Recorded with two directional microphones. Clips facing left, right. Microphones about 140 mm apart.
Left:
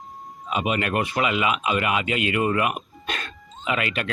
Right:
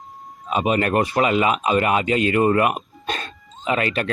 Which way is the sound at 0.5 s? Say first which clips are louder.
Right 5 dB; 40° right (ahead or behind).